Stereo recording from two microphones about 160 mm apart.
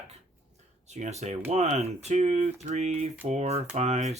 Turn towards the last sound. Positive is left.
turn(degrees=-45)  # may be behind; listen again after turning